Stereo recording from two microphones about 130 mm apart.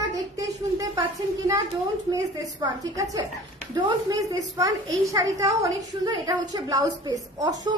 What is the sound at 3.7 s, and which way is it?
A woman's voice, 30° right (ahead or behind).